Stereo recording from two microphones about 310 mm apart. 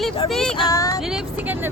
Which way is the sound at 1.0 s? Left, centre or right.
Centre.